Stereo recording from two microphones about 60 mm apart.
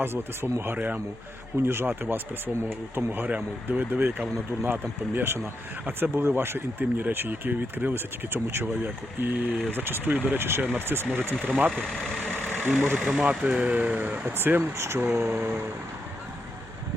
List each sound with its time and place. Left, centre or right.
0.0 s speech: right
11.7 s speech: centre
12.4 s vehicle: left
12.6 s speech: right
13.0 s speech: centre; by 15.6 s right